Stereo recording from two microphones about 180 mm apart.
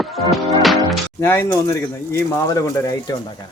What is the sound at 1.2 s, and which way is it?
Speech, 10° left (ahead or behind).